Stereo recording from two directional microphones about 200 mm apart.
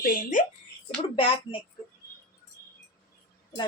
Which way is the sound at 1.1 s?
25° left (ahead or behind).